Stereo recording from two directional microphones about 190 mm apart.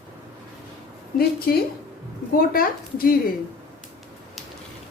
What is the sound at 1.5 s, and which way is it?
A woman's voice, 55° left (ahead or behind).